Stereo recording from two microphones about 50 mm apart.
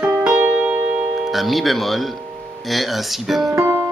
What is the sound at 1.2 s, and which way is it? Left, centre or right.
Speech, centre.